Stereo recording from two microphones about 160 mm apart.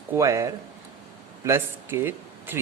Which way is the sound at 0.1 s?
20° right (ahead or behind).